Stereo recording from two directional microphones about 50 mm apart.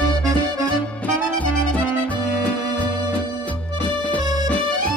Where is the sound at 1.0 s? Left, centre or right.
Left.